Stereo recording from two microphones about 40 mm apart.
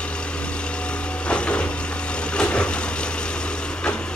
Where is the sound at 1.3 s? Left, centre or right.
Left.